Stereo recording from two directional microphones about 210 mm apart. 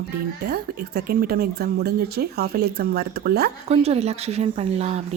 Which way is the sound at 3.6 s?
30° right (ahead or behind).